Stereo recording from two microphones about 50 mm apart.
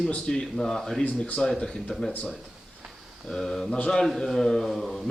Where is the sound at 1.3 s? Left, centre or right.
Centre.